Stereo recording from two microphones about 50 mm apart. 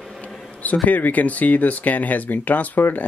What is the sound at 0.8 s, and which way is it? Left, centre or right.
Speech, left.